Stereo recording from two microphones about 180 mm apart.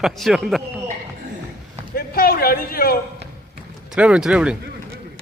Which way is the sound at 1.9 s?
55° left (ahead or behind).